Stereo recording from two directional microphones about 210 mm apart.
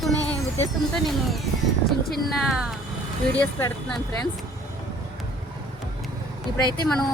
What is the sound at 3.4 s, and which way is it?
Speech, 15° left (ahead or behind).